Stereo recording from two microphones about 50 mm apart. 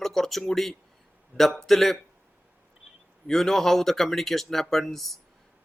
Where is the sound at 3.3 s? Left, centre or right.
Centre.